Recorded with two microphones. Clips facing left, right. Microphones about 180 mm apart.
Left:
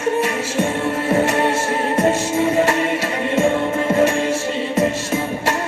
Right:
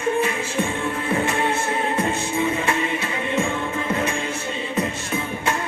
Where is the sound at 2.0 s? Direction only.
45° left (ahead or behind).